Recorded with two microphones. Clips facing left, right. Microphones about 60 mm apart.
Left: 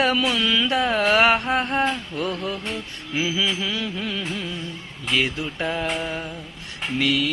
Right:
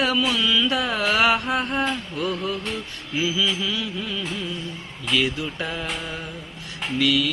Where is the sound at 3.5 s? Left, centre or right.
Left.